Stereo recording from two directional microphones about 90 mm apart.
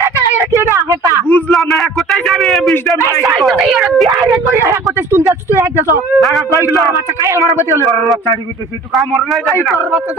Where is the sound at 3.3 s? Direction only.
Centre (ahead or behind).